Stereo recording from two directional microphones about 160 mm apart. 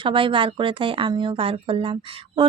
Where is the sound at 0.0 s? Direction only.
35° right (ahead or behind).